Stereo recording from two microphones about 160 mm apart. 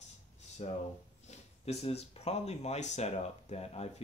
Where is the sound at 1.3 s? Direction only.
40° left (ahead or behind).